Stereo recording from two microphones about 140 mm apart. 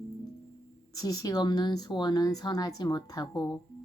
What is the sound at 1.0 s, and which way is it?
Speech, 25° left (ahead or behind).